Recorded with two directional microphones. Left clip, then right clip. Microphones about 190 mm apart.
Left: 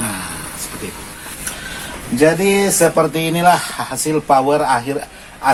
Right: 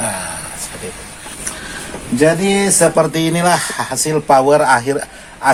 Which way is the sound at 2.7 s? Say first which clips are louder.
Right 1 dB; 30° right (ahead or behind).